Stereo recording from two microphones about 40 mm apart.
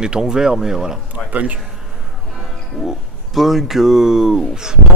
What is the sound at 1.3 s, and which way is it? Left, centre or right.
Speech, right.